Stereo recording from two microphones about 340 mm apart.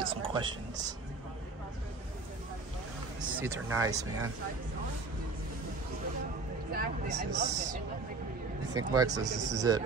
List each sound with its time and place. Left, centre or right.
0.0 s speech: centre
3.2 s a sound: centre
3.7 s speech: centre
6.7 s speech: right
7.2 s speech: right
8.7 s speech: centre
9.3 s speech: right